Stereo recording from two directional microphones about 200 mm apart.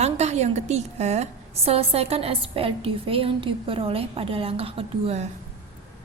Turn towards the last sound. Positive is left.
turn(degrees=-30)  # may be behind; listen again after turning